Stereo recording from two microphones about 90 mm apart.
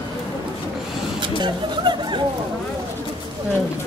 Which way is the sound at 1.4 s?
60° right (ahead or behind).